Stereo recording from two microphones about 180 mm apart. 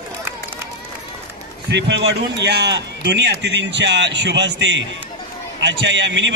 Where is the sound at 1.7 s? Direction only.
75° right (ahead or behind).